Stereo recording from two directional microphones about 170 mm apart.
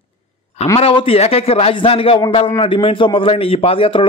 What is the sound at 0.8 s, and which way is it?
A man's voice, 35° left (ahead or behind).